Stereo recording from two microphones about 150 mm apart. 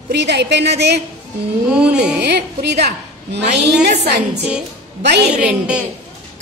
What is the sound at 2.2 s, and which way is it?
A woman's voice, 90° right.